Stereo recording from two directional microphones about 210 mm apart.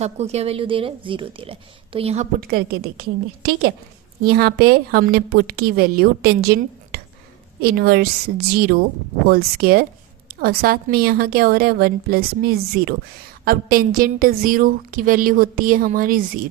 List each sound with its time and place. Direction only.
0.0 s a woman's voice: 30° right (ahead or behind)
2.4 s a woman's voice: 45° right (ahead or behind)